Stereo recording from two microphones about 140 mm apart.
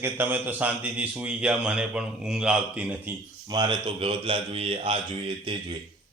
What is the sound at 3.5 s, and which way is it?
Speech, 35° right (ahead or behind).